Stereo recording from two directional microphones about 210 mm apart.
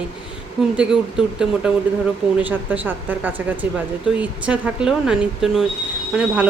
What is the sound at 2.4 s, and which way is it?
A woman's voice, 5° right (ahead or behind).